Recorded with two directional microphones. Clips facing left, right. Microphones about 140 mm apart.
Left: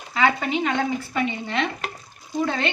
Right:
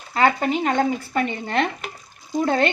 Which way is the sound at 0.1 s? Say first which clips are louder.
Right 2 dB; 45° right (ahead or behind).